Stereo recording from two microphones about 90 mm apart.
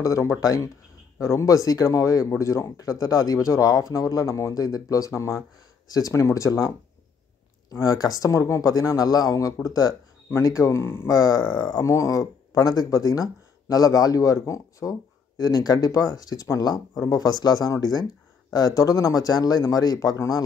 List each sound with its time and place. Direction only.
0.0 s speech: 35° left (ahead or behind)
7.7 s speech: 40° left (ahead or behind)
11.1 s a man's voice: 45° left (ahead or behind)